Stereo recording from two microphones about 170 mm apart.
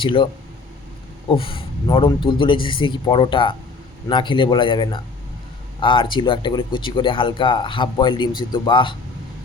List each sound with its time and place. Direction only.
0.0 s speech: 30° left (ahead or behind)
1.3 s a man's voice: 30° left (ahead or behind)